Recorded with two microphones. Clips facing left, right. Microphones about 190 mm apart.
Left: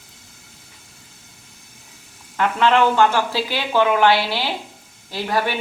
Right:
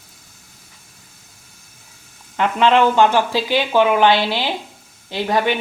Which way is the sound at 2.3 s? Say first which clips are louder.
Right 2 dB; 20° right (ahead or behind).